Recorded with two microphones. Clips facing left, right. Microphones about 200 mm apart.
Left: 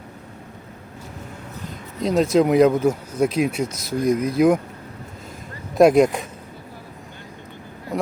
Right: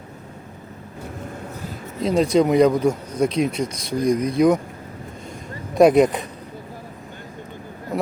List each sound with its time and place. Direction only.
1.6 s speech: centre (ahead or behind)
5.7 s speech: centre (ahead or behind)